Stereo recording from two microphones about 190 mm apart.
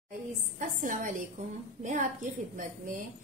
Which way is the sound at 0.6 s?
45° right (ahead or behind).